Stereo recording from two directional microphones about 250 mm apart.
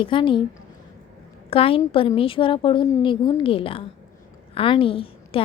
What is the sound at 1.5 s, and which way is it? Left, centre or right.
A woman's voice, left.